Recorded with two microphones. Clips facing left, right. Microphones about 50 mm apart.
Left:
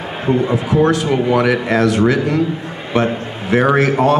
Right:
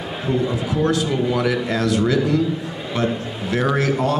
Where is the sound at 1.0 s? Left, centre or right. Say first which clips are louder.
Left 6 dB; left.